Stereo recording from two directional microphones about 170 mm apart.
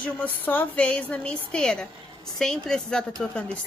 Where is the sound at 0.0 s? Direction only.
10° left (ahead or behind).